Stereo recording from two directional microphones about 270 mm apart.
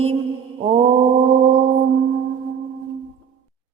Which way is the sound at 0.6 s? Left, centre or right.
Centre.